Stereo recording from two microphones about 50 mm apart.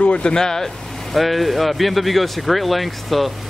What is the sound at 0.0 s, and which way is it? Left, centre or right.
Speech, centre.